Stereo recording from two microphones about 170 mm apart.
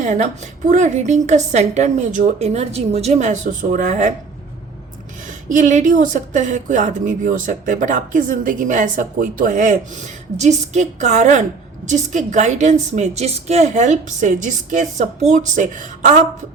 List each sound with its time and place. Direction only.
0.0 s speech: 45° right (ahead or behind)
5.5 s speech: 50° right (ahead or behind)